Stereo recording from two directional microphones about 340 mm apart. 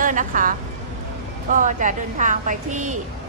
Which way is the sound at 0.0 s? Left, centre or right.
Right.